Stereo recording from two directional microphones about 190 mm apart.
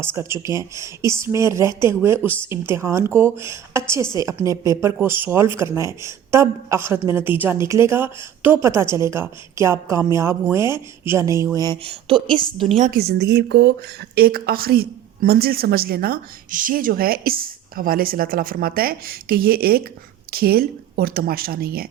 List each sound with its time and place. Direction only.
0.0 s a woman's voice: 15° right (ahead or behind)
12.6 s a woman's voice: 40° right (ahead or behind)
13.0 s speech: 60° right (ahead or behind)